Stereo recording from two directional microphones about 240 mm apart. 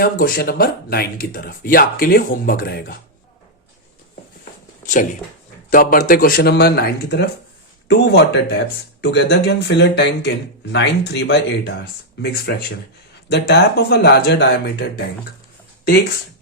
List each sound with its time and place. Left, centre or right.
0.0 s speech: left
5.7 s speech: left